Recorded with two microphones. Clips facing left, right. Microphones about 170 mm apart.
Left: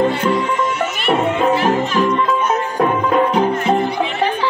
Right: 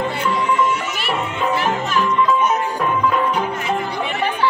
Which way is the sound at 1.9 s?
40° left (ahead or behind).